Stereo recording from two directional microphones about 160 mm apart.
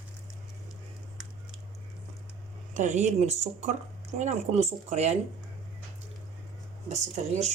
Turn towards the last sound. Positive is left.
turn(degrees=-45)  # may be behind; listen again after turning